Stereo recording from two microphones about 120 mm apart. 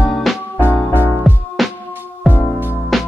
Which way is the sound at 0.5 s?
15° left (ahead or behind).